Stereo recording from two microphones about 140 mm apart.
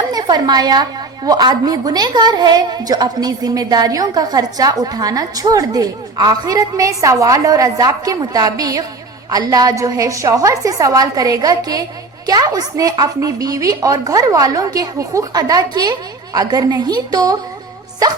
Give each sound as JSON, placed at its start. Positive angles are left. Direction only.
{"t": 0.1, "sound": "a woman's voice", "side_deg": -30}